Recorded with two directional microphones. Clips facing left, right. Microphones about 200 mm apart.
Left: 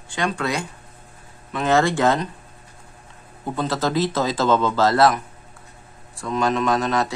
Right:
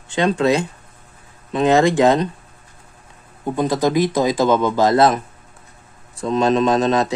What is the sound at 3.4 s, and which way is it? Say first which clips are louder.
Speech: right 5 dB; 15° right (ahead or behind).